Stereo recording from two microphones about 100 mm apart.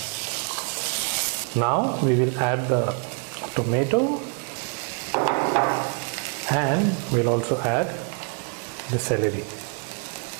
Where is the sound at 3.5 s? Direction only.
15° right (ahead or behind).